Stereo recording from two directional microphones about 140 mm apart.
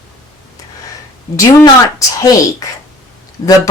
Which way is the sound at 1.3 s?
25° left (ahead or behind).